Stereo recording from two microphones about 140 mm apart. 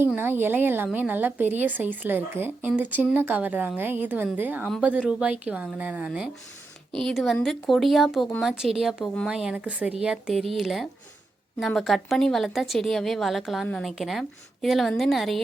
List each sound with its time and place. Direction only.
0.2 s speech: 15° right (ahead or behind)
6.9 s a woman's voice: centre (ahead or behind)